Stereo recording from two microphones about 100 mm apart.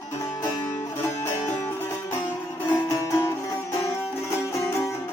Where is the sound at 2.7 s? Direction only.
30° left (ahead or behind).